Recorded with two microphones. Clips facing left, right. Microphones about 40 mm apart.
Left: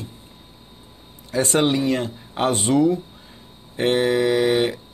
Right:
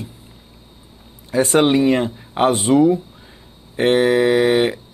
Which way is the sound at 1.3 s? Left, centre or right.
Centre.